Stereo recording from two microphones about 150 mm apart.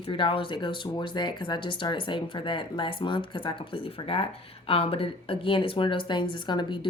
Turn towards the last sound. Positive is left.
turn(degrees=30)  # may be behind; listen again after turning